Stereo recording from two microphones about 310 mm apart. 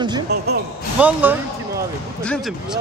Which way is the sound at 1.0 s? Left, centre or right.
Centre.